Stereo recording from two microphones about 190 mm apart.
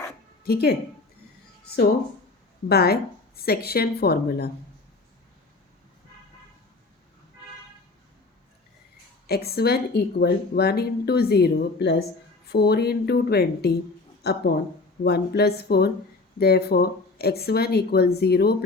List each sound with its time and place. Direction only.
0.4 s speech: 55° left (ahead or behind)
2.6 s speech: 55° left (ahead or behind)
9.2 s speech: 55° left (ahead or behind)